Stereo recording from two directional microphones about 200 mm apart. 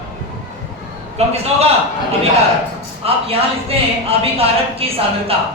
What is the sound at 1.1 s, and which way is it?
Speech, 30° right (ahead or behind).